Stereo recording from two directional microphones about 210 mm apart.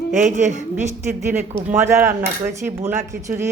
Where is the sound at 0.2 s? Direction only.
35° right (ahead or behind).